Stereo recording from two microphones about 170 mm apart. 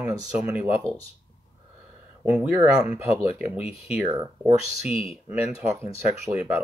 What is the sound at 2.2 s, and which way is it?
Speech, 10° right (ahead or behind).